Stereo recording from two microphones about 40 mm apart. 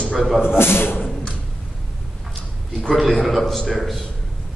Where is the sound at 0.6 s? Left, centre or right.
Left.